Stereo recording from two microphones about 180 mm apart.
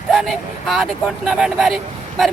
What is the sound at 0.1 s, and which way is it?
Speech, centre (ahead or behind).